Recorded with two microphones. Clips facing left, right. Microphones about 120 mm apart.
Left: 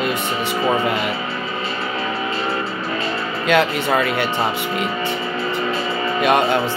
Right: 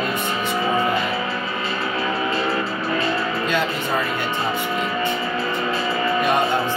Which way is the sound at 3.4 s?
90° left.